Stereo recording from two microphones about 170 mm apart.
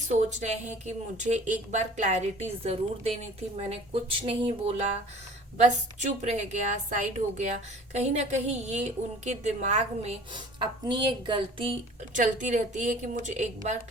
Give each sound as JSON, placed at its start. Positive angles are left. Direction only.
{"t": 0.2, "sound": "speech", "side_deg": -40}
{"t": 3.7, "sound": "a sound", "side_deg": -35}
{"t": 5.5, "sound": "speech", "side_deg": -40}
{"t": 10.3, "sound": "speech", "side_deg": -25}
{"t": 12.1, "sound": "speech", "side_deg": -45}